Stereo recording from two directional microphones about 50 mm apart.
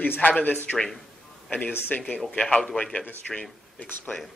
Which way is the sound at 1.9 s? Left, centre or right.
Left.